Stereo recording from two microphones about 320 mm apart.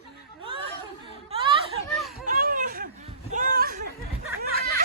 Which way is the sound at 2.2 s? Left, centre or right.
Right.